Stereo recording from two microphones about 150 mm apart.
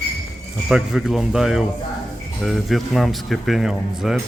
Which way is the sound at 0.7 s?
Centre (ahead or behind).